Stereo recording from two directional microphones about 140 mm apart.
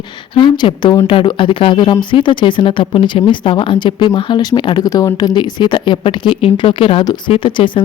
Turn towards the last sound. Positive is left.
turn(degrees=35)  # may be behind; listen again after turning